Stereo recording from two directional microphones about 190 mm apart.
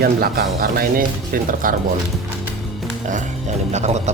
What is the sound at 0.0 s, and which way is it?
Speech, 55° right (ahead or behind).